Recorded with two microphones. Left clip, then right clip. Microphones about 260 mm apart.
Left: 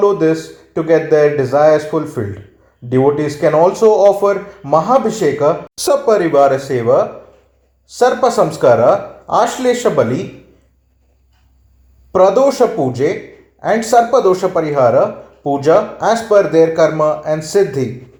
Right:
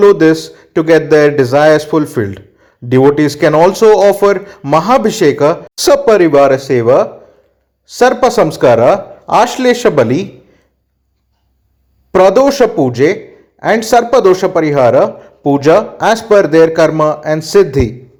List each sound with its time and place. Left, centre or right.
0.0 s speech: right
12.1 s speech: right